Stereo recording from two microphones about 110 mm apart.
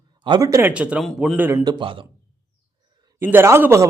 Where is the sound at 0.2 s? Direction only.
45° right (ahead or behind).